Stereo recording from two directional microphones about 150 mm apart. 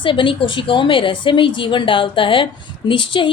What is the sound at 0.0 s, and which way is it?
Speech, 35° left (ahead or behind).